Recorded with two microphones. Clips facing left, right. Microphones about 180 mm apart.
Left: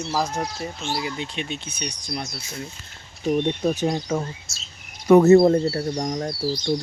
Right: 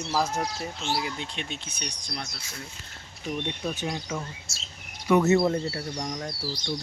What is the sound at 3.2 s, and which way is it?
Speech, 40° left (ahead or behind).